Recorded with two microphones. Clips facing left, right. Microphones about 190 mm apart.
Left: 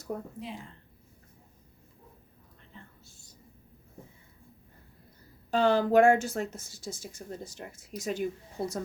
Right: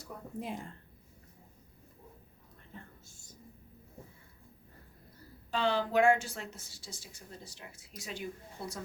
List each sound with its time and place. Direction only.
0.3 s speech: 50° right (ahead or behind)
3.1 s whispering: 50° right (ahead or behind)
5.5 s a woman's voice: 45° left (ahead or behind)